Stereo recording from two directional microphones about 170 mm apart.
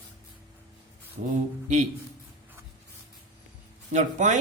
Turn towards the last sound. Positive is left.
turn(degrees=-45)  # may be behind; listen again after turning